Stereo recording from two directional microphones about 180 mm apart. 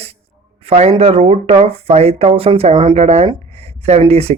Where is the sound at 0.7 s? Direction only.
35° right (ahead or behind).